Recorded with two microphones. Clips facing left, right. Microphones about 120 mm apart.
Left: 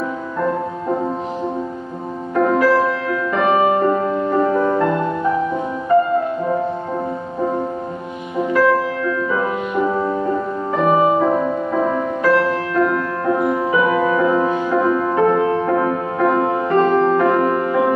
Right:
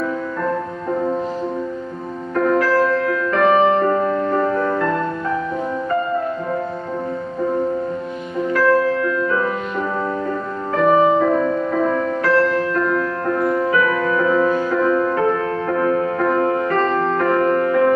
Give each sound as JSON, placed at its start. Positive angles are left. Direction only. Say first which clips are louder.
{"t": 2.3, "sound": "music", "louder": "left 2 dB", "side_deg": 15}
{"t": 8.4, "sound": "music", "louder": "left 1 dB", "side_deg": 15}